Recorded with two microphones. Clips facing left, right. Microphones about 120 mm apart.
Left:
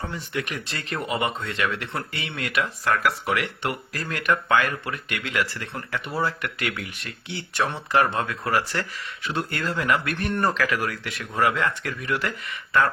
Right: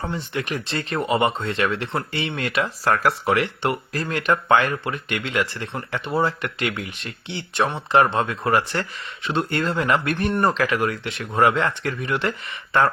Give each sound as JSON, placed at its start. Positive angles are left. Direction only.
{"t": 0.1, "sound": "speech", "side_deg": -30}